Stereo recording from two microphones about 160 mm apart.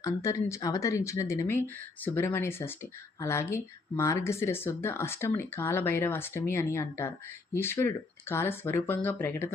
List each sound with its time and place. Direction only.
0.0 s speech: 20° left (ahead or behind)